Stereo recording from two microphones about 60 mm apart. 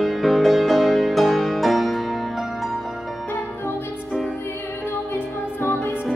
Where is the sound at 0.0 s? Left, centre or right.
Centre.